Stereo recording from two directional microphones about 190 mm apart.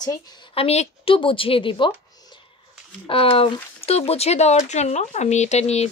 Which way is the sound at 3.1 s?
30° left (ahead or behind).